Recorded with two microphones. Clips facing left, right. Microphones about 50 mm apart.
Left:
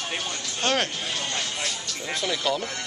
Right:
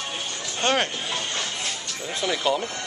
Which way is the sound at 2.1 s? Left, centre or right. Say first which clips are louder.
Right 3 dB; centre.